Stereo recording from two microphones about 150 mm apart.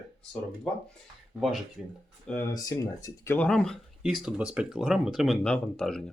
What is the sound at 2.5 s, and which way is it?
Speech, 25° left (ahead or behind).